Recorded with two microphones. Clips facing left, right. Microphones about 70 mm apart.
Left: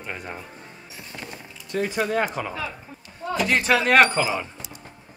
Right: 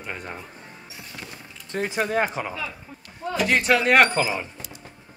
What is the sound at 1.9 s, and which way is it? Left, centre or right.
Speech, centre.